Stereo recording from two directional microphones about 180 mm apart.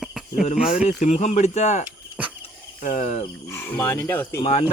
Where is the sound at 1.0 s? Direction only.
40° left (ahead or behind).